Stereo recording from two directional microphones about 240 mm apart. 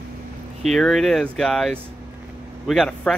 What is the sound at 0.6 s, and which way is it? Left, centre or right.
Speech, centre.